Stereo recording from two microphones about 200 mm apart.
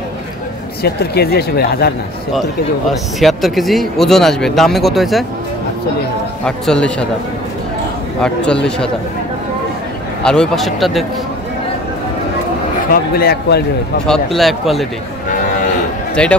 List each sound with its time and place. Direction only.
0.8 s speech: 55° left (ahead or behind)
2.9 s speech: centre (ahead or behind)
6.4 s speech: 5° left (ahead or behind)
8.2 s speech: 5° left (ahead or behind)
10.2 s speech: 5° left (ahead or behind)
12.9 s speech: 50° left (ahead or behind)
14.0 s speech: centre (ahead or behind)
16.2 s speech: 5° left (ahead or behind)